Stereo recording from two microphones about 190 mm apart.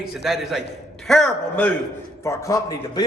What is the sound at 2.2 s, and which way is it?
Speech, 15° left (ahead or behind).